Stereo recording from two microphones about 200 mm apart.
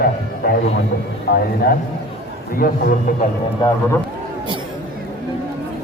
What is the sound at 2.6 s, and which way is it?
Speech, 45° left (ahead or behind).